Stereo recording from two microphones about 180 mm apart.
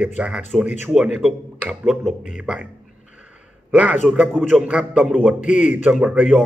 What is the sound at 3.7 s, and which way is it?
A man's voice, 5° right (ahead or behind).